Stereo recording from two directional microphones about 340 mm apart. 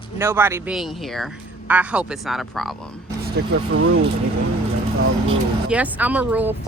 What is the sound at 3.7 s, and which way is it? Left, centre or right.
Speech, right.